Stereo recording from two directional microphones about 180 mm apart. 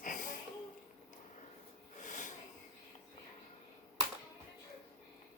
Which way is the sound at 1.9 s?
45° left (ahead or behind).